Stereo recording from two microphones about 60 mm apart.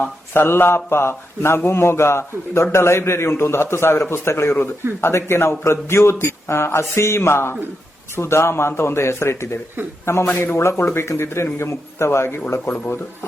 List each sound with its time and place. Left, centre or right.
0.3 s a man's voice: left